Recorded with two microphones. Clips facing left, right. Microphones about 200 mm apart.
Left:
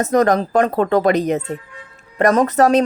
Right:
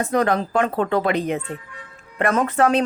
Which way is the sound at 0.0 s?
45° left (ahead or behind).